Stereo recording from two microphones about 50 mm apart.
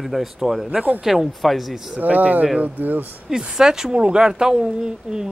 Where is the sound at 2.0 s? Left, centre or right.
Right.